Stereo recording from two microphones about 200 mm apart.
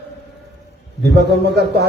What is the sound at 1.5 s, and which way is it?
Speech, 55° right (ahead or behind).